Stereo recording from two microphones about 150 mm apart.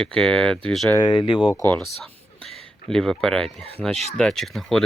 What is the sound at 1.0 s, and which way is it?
Speech, 30° left (ahead or behind).